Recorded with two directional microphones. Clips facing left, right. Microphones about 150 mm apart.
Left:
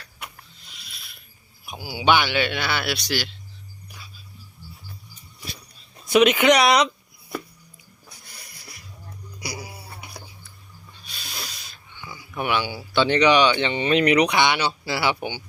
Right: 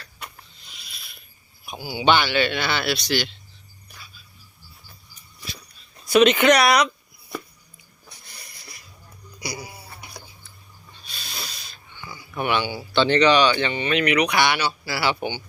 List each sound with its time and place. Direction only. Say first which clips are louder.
0.3 s pulleys: even; centre (ahead or behind)
1.6 s speech: right 1 dB; 10° left (ahead or behind)
6.1 s speech: right 1 dB; 10° left (ahead or behind)
8.1 s a sound: right 1 dB; 5° left (ahead or behind)
11.0 s snort: even; 10° left (ahead or behind)
12.4 s speech: right 1 dB; 5° left (ahead or behind); by 14.3 s 35° left (ahead or behind)
14.3 s speech: even; 20° left (ahead or behind)
15.2 s speech: right 2 dB; 5° left (ahead or behind)